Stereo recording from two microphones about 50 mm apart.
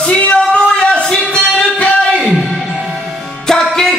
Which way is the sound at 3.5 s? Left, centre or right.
Centre.